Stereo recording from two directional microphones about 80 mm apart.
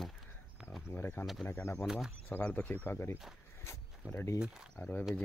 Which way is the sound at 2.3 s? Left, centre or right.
Centre.